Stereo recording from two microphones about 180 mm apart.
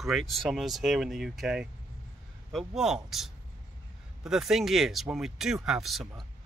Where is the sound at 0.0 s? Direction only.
Centre (ahead or behind).